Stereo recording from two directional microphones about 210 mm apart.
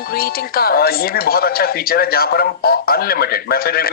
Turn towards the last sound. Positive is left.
turn(degrees=45)  # may be behind; listen again after turning